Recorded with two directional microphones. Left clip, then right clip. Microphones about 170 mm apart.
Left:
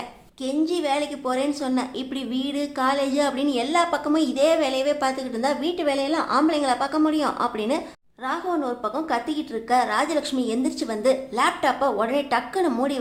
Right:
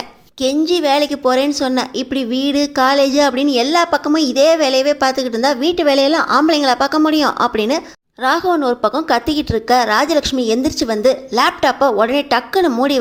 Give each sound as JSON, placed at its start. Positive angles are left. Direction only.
{"t": 0.4, "sound": "a woman's voice", "side_deg": -30}